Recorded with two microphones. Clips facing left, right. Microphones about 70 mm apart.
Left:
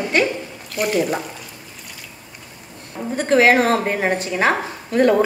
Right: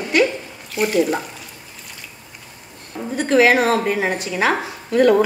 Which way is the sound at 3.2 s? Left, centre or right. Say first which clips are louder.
Even; left.